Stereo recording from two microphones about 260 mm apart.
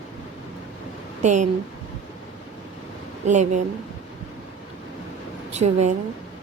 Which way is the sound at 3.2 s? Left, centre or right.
Right.